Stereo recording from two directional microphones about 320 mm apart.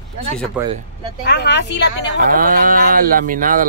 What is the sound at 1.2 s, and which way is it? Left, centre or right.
A woman's voice, left.